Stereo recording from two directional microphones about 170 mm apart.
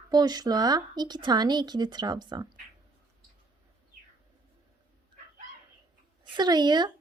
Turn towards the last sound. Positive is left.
turn(degrees=-25)  # may be behind; listen again after turning